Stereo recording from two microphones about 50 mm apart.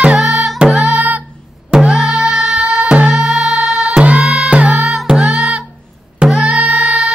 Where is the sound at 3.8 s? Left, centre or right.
Right.